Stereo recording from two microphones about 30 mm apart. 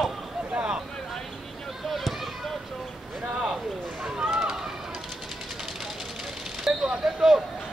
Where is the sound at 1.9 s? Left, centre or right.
Centre.